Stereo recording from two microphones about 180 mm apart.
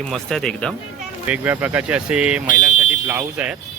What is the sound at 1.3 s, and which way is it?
Speech, 10° right (ahead or behind).